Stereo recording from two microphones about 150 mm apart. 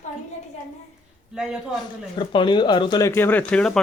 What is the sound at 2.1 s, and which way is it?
Speech, 35° left (ahead or behind).